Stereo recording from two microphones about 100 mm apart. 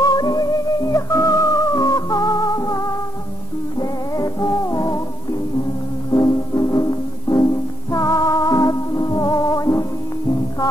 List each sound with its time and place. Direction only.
0.0 s music: 40° left (ahead or behind)
6.1 s music: 35° left (ahead or behind)